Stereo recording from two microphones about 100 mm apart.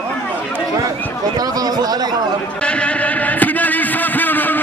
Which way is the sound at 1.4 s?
40° right (ahead or behind).